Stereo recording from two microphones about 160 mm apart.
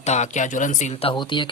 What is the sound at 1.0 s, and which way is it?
Speech, 30° left (ahead or behind).